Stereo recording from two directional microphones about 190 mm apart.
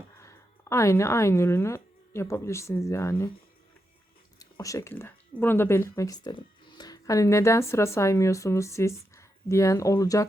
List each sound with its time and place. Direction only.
0.2 s speech: 15° left (ahead or behind)
4.4 s speech: 20° left (ahead or behind)